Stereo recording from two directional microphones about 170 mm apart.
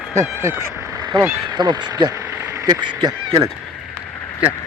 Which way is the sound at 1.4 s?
25° right (ahead or behind).